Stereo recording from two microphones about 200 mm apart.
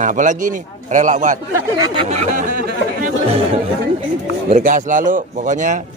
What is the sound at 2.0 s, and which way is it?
Chatter, 35° right (ahead or behind).